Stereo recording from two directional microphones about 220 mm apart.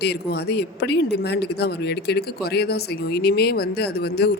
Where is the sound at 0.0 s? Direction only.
50° left (ahead or behind).